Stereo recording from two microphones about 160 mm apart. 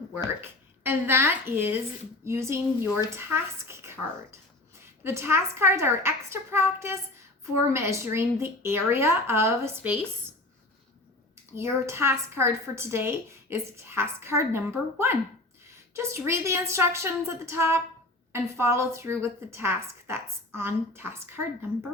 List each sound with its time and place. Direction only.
0.4 s a woman's voice: 15° right (ahead or behind)
5.0 s a woman's voice: 15° right (ahead or behind)
11.5 s a woman's voice: 15° right (ahead or behind)